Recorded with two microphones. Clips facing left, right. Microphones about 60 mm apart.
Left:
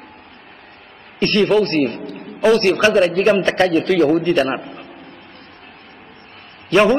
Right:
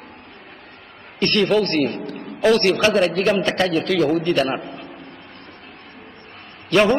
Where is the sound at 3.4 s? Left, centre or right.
Left.